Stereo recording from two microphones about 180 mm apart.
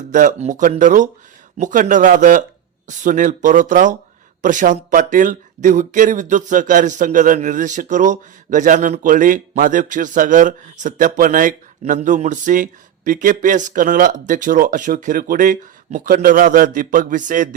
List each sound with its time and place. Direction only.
0.1 s speech: 45° right (ahead or behind)